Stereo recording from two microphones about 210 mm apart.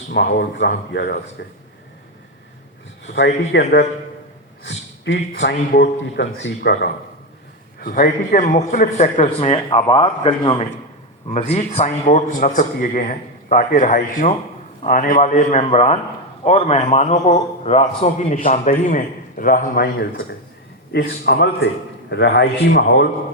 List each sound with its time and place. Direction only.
0.3 s a man's voice: 50° left (ahead or behind)
3.2 s a man's voice: 55° left (ahead or behind)
5.0 s a man's voice: 55° left (ahead or behind)